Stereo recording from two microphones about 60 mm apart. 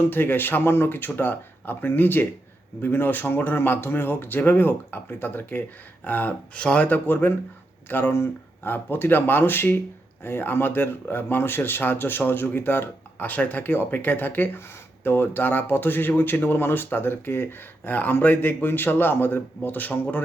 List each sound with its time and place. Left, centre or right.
0.0 s speech: left
6.6 s speech: centre
6.8 s speech: left